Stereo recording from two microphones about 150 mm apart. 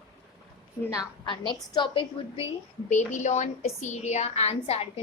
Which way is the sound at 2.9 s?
55° left (ahead or behind).